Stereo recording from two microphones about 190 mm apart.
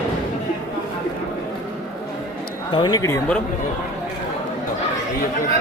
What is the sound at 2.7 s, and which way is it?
Speech, 20° left (ahead or behind).